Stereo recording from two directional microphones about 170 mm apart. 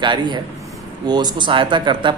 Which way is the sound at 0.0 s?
25° right (ahead or behind).